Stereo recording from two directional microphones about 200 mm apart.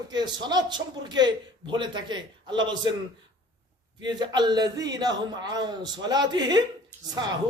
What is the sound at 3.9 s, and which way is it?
Speech, 20° right (ahead or behind).